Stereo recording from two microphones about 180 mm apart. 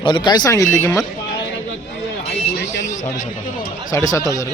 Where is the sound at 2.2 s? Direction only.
65° left (ahead or behind).